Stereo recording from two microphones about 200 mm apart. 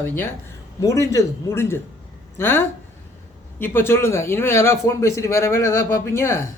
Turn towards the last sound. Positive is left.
turn(degrees=15)  # may be behind; listen again after turning